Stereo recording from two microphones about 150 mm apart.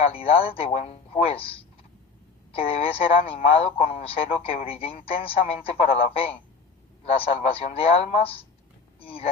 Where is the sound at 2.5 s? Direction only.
40° left (ahead or behind).